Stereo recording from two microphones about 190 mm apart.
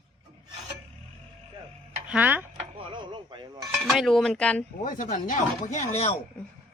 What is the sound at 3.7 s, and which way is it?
Speech, centre (ahead or behind).